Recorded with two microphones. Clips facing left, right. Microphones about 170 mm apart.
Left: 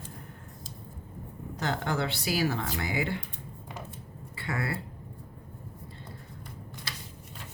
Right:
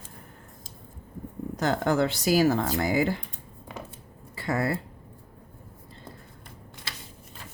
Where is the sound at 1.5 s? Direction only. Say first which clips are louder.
Right 6 dB; 45° right (ahead or behind).